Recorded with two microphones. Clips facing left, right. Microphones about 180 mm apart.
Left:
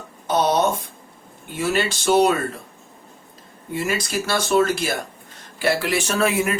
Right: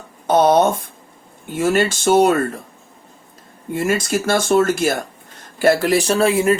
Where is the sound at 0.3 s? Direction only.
50° right (ahead or behind).